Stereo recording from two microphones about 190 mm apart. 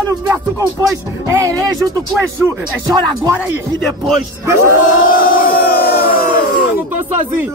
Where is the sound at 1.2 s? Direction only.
15° right (ahead or behind).